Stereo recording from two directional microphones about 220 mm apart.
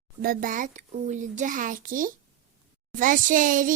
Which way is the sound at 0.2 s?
40° right (ahead or behind).